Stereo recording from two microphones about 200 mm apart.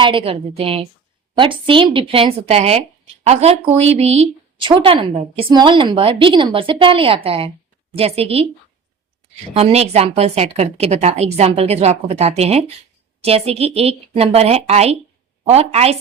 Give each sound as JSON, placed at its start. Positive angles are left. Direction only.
{"t": 0.0, "sound": "speech", "side_deg": -25}